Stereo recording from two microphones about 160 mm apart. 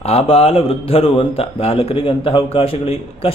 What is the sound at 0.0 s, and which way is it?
A man's voice, 40° left (ahead or behind).